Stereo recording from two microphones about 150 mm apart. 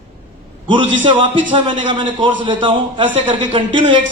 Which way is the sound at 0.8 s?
35° right (ahead or behind).